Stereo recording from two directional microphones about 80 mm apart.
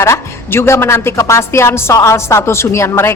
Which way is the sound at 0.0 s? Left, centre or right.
Left.